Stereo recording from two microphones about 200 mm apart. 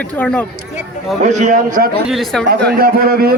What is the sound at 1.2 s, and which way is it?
A man's voice, 40° right (ahead or behind).